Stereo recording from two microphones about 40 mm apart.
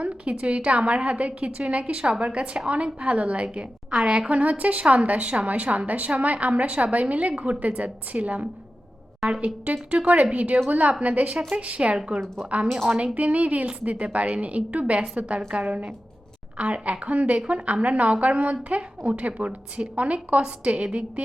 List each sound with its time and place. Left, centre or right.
0.0 s a woman's voice: right